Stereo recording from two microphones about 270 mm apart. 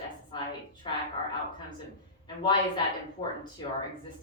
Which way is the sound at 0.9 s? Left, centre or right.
Centre.